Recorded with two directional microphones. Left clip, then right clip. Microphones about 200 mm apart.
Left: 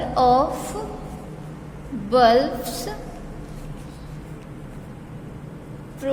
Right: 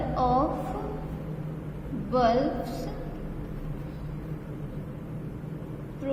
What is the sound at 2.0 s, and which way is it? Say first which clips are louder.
Speech: left 9 dB; 35° left (ahead or behind).